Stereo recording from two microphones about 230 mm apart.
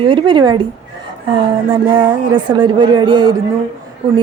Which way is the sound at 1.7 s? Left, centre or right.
Right.